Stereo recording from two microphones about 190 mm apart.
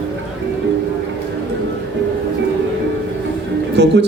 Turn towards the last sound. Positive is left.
turn(degrees=-65)  # may be behind; listen again after turning